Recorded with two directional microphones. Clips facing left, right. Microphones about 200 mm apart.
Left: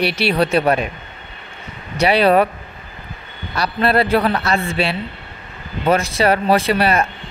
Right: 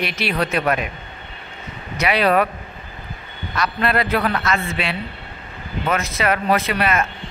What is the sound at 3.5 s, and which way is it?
Speech, 35° left (ahead or behind).